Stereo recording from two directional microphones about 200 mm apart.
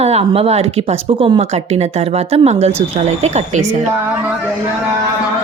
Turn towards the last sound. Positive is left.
turn(degrees=-35)  # may be behind; listen again after turning